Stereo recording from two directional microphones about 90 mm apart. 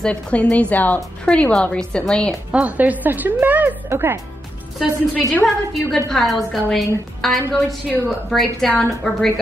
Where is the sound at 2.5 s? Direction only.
15° right (ahead or behind).